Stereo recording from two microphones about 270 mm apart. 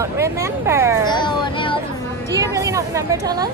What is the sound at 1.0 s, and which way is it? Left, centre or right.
Speech, centre.